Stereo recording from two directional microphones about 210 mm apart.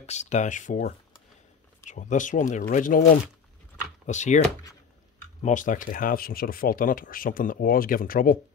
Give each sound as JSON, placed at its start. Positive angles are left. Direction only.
{"t": 0.0, "sound": "speech", "side_deg": 35}
{"t": 5.4, "sound": "speech", "side_deg": 35}